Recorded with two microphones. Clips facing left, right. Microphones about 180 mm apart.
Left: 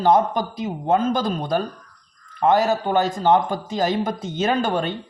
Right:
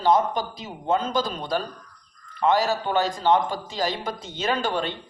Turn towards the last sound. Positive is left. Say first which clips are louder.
# left 4 dB
turn(degrees=50)  # may be behind; listen again after turning